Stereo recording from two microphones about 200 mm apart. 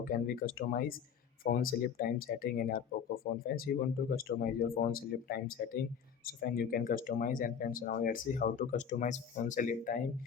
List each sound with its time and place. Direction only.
0.0 s speech: 45° left (ahead or behind)